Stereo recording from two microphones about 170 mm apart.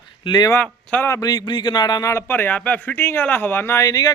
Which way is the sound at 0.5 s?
10° left (ahead or behind).